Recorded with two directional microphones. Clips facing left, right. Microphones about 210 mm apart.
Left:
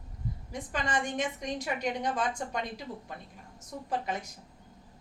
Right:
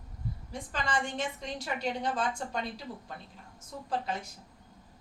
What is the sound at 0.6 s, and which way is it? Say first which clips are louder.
A woman's voice: left 1 dB; 20° left (ahead or behind).